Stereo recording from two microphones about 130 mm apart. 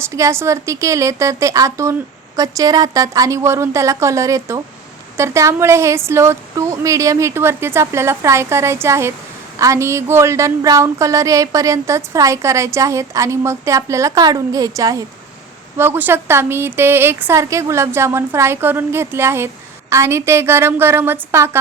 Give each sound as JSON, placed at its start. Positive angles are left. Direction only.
{"t": 0.0, "sound": "speech", "side_deg": -20}